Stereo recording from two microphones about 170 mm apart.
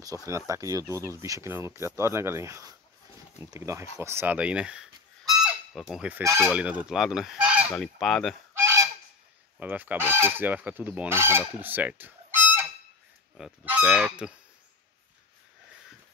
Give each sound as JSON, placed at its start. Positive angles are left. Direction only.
{"t": 0.5, "sound": "speech", "side_deg": -20}
{"t": 5.3, "sound": "fowl", "side_deg": 0}
{"t": 6.3, "sound": "goose", "side_deg": 0}
{"t": 8.5, "sound": "goose", "side_deg": -15}
{"t": 9.6, "sound": "speech", "side_deg": -10}